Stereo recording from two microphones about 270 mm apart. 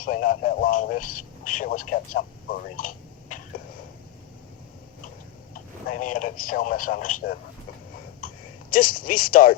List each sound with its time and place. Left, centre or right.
0.0 s a man's voice: left
5.5 s speech: left
8.7 s speech: left